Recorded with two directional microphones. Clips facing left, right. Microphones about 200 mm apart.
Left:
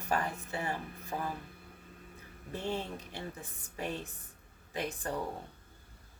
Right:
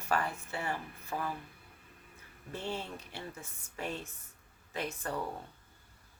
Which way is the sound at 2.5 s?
20° left (ahead or behind).